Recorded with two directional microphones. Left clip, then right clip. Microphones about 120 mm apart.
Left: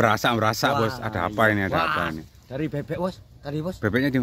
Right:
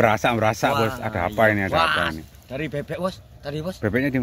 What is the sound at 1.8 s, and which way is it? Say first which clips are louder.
Speech: right 4 dB; 35° left (ahead or behind).